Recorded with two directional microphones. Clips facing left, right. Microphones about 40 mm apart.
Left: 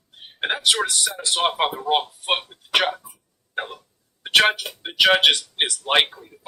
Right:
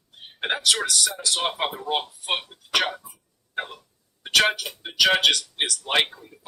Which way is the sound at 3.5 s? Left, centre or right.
Left.